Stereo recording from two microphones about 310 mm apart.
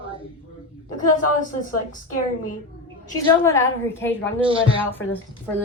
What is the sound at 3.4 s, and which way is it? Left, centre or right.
A woman's voice, centre.